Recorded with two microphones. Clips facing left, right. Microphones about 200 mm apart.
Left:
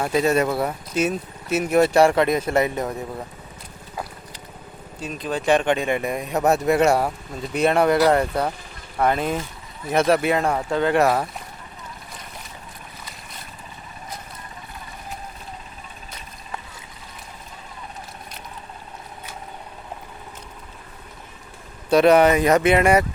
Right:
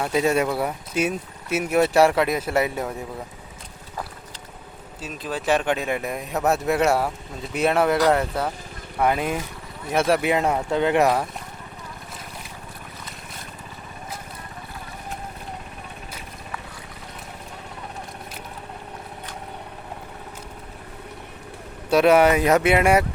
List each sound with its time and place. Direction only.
0.0 s speech: 10° right (ahead or behind)
4.9 s speech: 5° right (ahead or behind)
21.8 s speech: 5° right (ahead or behind)